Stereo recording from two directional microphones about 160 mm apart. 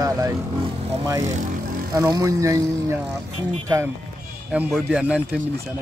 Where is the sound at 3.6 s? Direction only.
15° right (ahead or behind).